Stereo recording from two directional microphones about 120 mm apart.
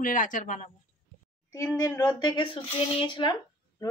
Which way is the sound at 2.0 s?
40° left (ahead or behind).